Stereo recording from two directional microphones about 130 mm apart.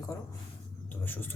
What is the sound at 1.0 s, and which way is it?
Speech, 15° left (ahead or behind).